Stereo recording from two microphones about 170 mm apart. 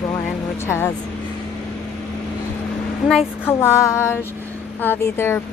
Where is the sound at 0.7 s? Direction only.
15° left (ahead or behind).